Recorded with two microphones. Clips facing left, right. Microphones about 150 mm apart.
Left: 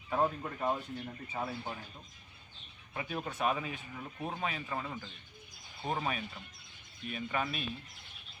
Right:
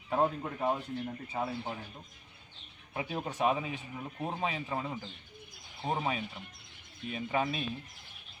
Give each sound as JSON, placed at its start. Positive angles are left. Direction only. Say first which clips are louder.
{"t": 0.1, "sound": "speech", "louder": "right 2 dB", "side_deg": -20}
{"t": 2.9, "sound": "speech", "louder": "right 2 dB", "side_deg": -25}